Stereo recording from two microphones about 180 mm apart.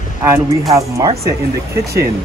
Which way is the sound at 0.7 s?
20° right (ahead or behind).